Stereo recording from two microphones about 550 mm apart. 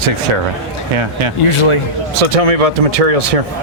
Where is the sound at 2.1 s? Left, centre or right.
Right.